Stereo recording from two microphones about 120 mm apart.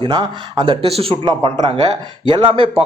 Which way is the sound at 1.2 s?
35° right (ahead or behind).